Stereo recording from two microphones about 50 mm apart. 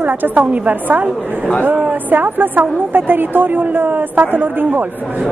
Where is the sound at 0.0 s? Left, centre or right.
Right.